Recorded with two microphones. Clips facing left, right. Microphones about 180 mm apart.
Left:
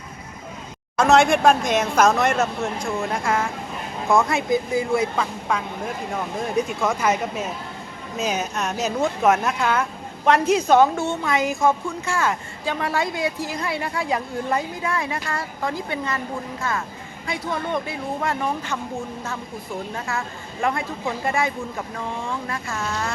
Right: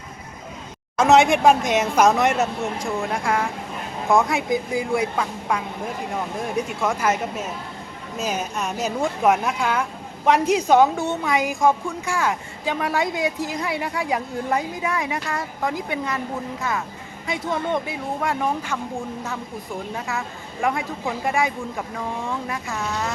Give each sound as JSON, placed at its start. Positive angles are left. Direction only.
{"t": 0.9, "sound": "a woman's voice", "side_deg": -15}
{"t": 2.8, "sound": "speech", "side_deg": 0}
{"t": 4.1, "sound": "a woman's voice", "side_deg": -15}
{"t": 5.2, "sound": "a woman's voice", "side_deg": 0}
{"t": 7.1, "sound": "speech", "side_deg": 10}
{"t": 8.2, "sound": "a woman's voice", "side_deg": -10}
{"t": 20.1, "sound": "a woman's voice", "side_deg": -15}
{"t": 22.7, "sound": "speech", "side_deg": 0}